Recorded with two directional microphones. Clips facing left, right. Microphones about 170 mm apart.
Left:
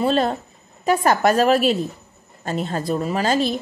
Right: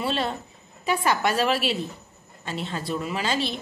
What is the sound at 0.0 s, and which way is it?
A woman's voice, 40° left (ahead or behind).